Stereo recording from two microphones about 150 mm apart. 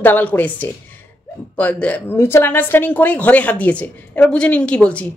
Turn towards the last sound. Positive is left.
turn(degrees=10)  # may be behind; listen again after turning